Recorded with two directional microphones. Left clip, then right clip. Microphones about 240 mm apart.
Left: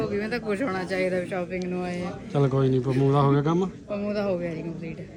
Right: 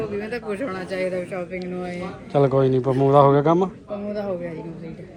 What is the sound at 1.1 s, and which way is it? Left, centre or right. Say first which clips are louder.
A man's voice: right 1 dB; centre.